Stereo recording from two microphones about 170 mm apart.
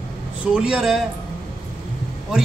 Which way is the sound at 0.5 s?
5° right (ahead or behind).